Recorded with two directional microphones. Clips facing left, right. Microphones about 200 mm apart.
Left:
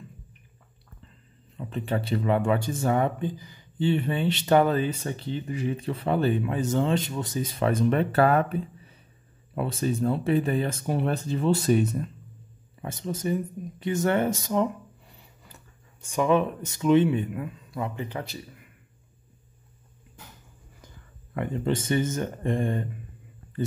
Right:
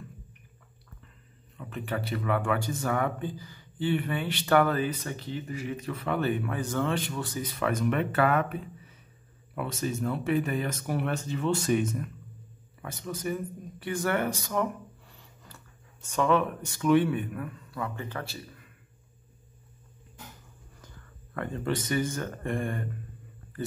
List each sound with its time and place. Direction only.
1.6 s speech: 30° left (ahead or behind)
12.8 s speech: 25° left (ahead or behind)
20.8 s speech: 15° left (ahead or behind)